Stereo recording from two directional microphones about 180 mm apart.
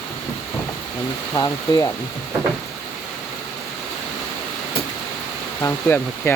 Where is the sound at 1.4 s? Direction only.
20° left (ahead or behind).